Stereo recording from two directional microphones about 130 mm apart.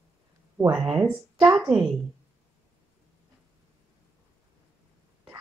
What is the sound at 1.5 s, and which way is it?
Speech, 10° right (ahead or behind).